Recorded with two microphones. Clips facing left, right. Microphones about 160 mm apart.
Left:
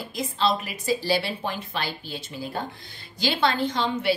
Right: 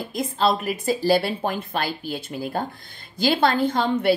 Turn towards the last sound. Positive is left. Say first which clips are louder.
# right 4 dB
turn(degrees=-55)  # may be behind; listen again after turning